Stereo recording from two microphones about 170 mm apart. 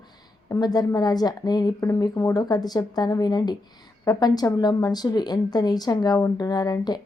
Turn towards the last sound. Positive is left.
turn(degrees=25)  # may be behind; listen again after turning